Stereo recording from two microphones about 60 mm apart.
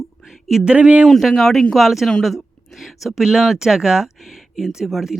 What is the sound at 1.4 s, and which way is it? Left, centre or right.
Speech, centre.